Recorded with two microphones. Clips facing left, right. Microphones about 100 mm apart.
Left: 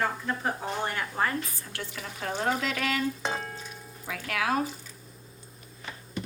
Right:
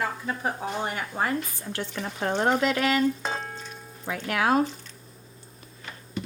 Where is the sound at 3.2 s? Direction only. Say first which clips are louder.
Right 1 dB; 5° left (ahead or behind).